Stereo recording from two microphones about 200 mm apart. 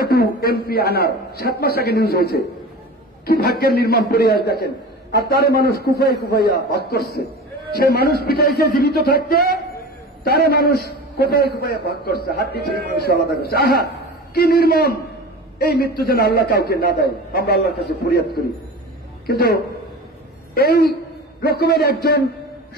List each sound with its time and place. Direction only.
0.0 s a man's voice: 50° left (ahead or behind)
3.3 s a man's voice: 50° left (ahead or behind)